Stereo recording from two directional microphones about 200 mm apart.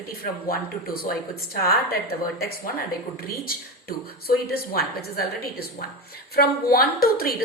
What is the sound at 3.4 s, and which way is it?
A woman's voice, 50° left (ahead or behind).